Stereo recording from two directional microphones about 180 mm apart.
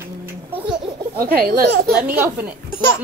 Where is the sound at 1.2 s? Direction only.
55° right (ahead or behind).